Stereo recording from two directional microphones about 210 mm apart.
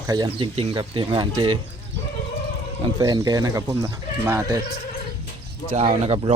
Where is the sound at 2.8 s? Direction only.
20° right (ahead or behind).